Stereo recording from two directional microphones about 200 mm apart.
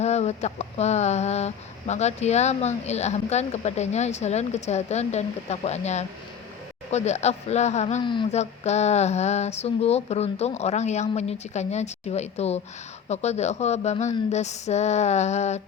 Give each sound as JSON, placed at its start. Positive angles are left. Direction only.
{"t": 0.0, "sound": "speech", "side_deg": 35}